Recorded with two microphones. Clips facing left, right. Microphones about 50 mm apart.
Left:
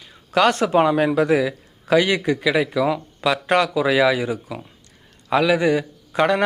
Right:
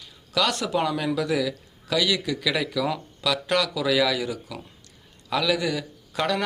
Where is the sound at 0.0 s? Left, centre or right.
Left.